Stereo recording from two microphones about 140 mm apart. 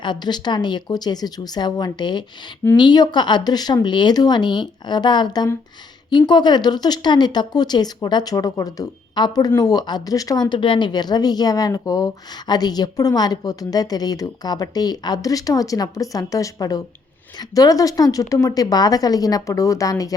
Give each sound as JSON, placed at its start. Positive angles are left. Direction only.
{"t": 0.0, "sound": "speech", "side_deg": 30}